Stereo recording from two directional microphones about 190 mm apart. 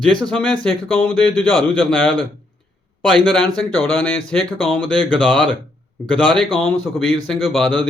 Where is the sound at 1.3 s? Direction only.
5° left (ahead or behind).